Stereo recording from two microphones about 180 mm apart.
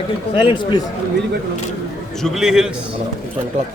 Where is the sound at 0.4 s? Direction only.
25° left (ahead or behind).